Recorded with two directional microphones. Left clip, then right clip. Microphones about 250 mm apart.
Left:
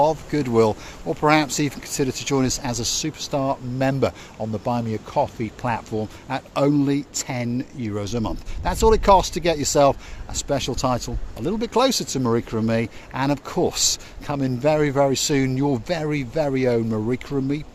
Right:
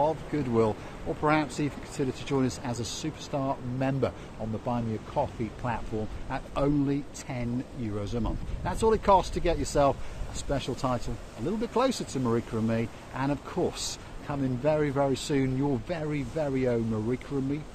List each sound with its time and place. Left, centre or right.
0.0 s speech: left